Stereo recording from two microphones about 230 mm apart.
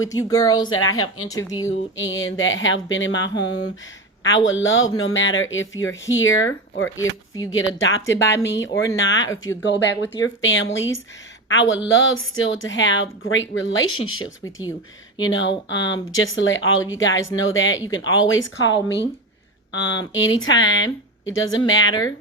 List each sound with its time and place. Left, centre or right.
0.0 s speech: centre
0.7 s a woman's voice: left
1.3 s speech: centre
2.0 s a woman's voice: left
15.2 s a woman's voice: left
20.1 s a woman's voice: left